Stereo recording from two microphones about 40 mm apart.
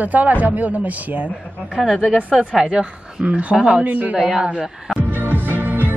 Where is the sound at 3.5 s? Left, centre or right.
Right.